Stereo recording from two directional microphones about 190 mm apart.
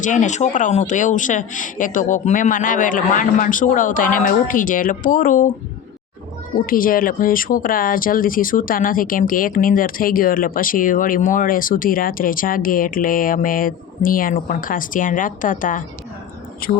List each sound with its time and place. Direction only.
0.0 s speech: 40° left (ahead or behind)
6.7 s speech: 50° left (ahead or behind)